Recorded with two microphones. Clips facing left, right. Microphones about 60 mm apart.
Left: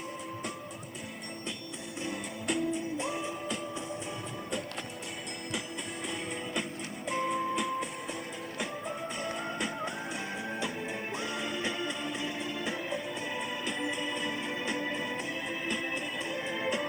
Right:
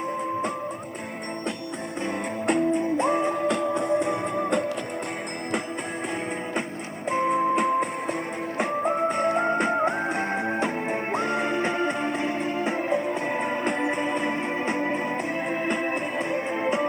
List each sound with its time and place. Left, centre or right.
2.0 s music: right
7.1 s music: right